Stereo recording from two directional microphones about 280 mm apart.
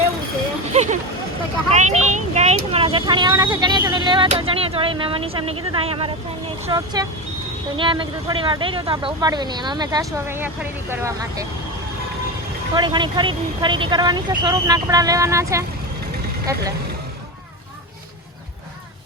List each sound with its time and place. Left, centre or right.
0.7 s vehicle: right
1.7 s speech: right
12.7 s speech: centre